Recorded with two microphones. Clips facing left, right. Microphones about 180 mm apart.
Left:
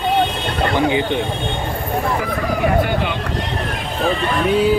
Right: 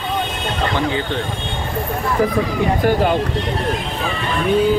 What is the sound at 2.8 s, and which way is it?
Speech, 40° right (ahead or behind).